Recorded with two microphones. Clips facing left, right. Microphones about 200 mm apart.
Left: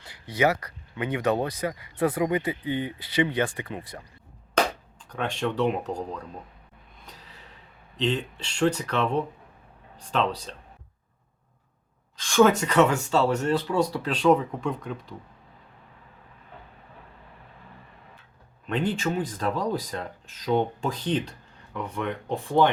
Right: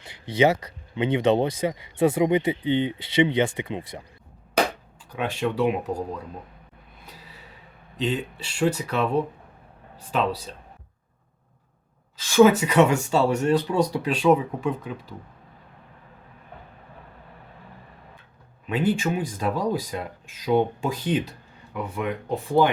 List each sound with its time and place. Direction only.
0.0 s speech: 25° right (ahead or behind)
5.0 s speech: 5° right (ahead or behind)
7.0 s gasp: 10° right (ahead or behind)
7.9 s speech: 5° right (ahead or behind)
12.1 s speech: 5° right (ahead or behind)
18.6 s speech: 5° right (ahead or behind)